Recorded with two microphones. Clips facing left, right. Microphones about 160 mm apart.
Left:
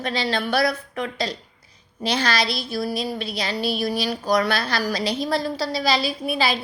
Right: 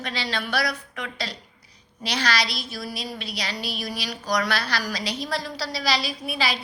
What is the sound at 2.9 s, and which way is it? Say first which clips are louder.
Speech: left 7 dB; 55° left (ahead or behind).